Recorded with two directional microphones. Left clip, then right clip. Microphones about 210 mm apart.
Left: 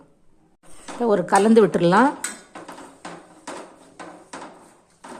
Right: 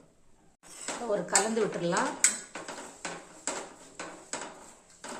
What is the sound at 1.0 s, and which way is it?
Speech, 50° left (ahead or behind).